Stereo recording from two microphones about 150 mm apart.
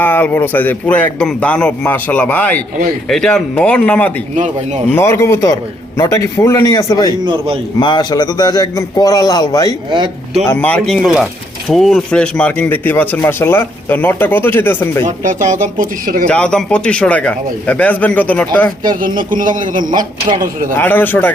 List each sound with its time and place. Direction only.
0.0 s a man's voice: 15° left (ahead or behind)
4.4 s speech: 55° right (ahead or behind)
4.9 s a man's voice: 15° left (ahead or behind)
7.3 s speech: 35° right (ahead or behind)
7.8 s a man's voice: 30° left (ahead or behind)
9.9 s speech: 30° right (ahead or behind)
10.4 s a man's voice: 10° left (ahead or behind)
15.0 s speech: 60° right (ahead or behind)
16.2 s a man's voice: 5° left (ahead or behind)
18.9 s speech: 65° right (ahead or behind)
19.9 s speech: 30° right (ahead or behind)
20.4 s speech: 60° right (ahead or behind)
20.7 s a man's voice: 15° left (ahead or behind)